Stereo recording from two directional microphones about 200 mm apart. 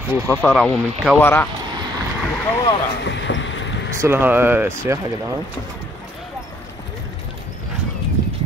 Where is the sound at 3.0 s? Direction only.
65° left (ahead or behind).